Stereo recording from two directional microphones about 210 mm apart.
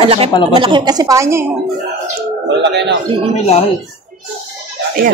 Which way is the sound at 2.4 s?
55° right (ahead or behind).